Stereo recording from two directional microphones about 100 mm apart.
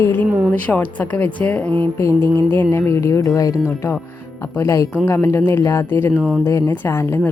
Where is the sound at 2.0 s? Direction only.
30° left (ahead or behind).